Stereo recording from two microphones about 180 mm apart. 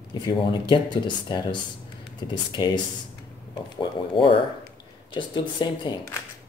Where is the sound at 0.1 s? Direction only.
25° left (ahead or behind).